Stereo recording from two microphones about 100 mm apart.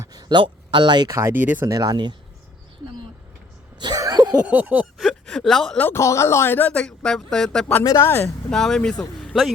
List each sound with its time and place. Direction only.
0.0 s speech: 45° right (ahead or behind)
1.3 s a sound: 15° right (ahead or behind)
1.6 s speech: 40° right (ahead or behind)
3.8 s a sound: 50° right (ahead or behind)
4.4 s a sound: 15° right (ahead or behind)
4.9 s speech: centre (ahead or behind)
5.8 s speech: 25° left (ahead or behind); by 7.7 s 5° left (ahead or behind)
7.9 s speech: 25° left (ahead or behind)
8.4 s speech: 5° left (ahead or behind)